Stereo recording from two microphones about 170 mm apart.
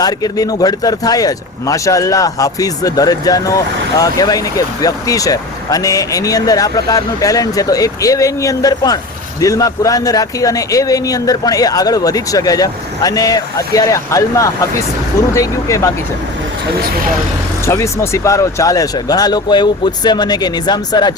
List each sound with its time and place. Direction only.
0.0 s a man's voice: 20° left (ahead or behind)
17.7 s a man's voice: 15° left (ahead or behind)